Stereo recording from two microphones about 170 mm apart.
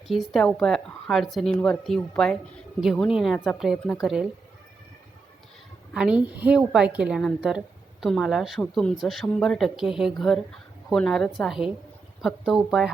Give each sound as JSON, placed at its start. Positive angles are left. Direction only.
{"t": 0.1, "sound": "speech", "side_deg": 0}
{"t": 5.9, "sound": "speech", "side_deg": -5}